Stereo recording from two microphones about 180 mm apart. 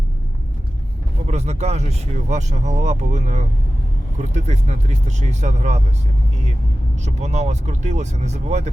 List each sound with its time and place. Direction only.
1.3 s speech: 40° right (ahead or behind)
7.0 s speech: 40° right (ahead or behind)